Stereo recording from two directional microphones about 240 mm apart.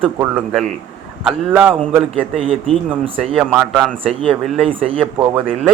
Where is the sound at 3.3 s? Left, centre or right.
Centre.